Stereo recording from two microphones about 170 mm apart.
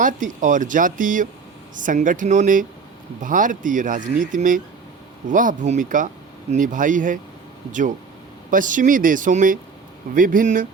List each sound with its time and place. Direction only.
0.0 s speech: 50° right (ahead or behind)